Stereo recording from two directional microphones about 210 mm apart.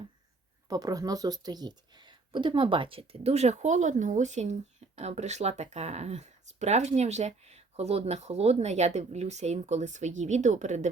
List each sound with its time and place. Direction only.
0.7 s speech: 15° right (ahead or behind); by 10.8 s 35° right (ahead or behind)